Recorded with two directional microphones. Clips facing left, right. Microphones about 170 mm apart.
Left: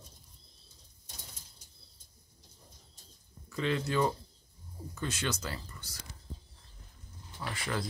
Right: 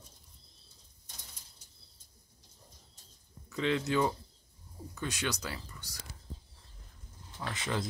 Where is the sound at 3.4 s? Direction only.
10° right (ahead or behind).